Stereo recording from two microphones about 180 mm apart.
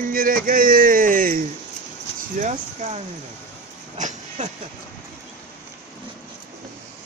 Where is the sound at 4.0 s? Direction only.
40° right (ahead or behind).